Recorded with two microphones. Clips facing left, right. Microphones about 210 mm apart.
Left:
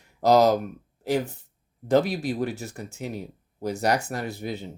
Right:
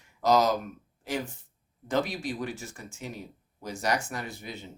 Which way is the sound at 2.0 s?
60° left (ahead or behind).